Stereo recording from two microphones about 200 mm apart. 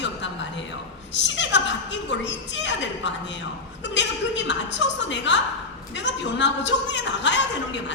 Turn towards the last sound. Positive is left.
turn(degrees=65)  # may be behind; listen again after turning